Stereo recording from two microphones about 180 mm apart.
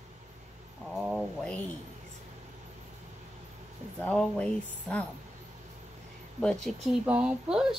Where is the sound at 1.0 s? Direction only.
Centre (ahead or behind).